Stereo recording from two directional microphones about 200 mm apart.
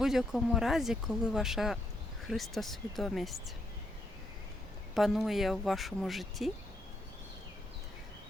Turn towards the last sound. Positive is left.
turn(degrees=0)  # may be behind; listen again after turning